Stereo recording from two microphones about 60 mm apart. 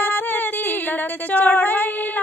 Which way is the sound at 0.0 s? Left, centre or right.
Left.